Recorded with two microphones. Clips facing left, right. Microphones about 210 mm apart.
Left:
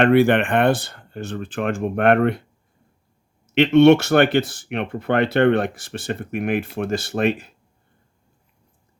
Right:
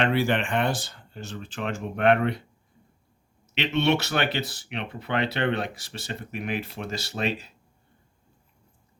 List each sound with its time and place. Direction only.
0.0 s speech: 60° left (ahead or behind)
3.4 s speech: 50° left (ahead or behind)